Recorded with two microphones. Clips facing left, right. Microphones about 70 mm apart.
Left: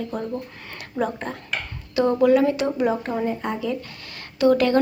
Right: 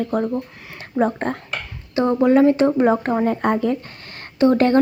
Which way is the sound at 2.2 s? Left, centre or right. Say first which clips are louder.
Right 5 dB; right.